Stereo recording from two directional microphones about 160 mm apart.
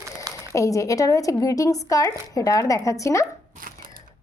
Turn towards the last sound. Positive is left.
turn(degrees=-60)  # may be behind; listen again after turning